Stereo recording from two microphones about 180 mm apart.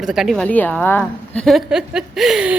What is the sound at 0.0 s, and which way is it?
A woman's voice, centre (ahead or behind).